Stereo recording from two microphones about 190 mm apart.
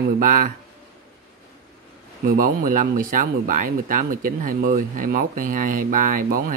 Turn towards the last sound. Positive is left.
turn(degrees=-45)  # may be behind; listen again after turning